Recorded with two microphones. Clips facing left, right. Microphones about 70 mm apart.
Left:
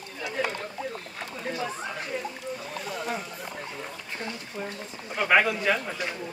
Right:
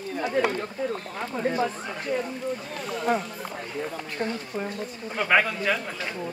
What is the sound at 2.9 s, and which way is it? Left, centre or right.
Speech, centre.